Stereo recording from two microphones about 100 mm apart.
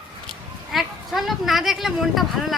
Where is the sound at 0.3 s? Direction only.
Centre (ahead or behind).